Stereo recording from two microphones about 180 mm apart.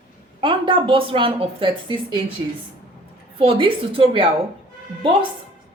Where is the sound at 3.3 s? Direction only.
30° right (ahead or behind).